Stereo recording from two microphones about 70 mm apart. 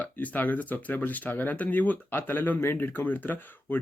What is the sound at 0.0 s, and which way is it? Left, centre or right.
Speech, left.